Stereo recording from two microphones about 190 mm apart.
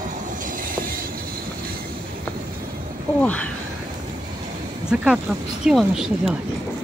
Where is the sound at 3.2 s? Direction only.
5° left (ahead or behind).